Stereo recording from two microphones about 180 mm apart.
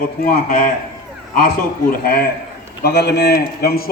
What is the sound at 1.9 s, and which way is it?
A man's voice, 60° left (ahead or behind).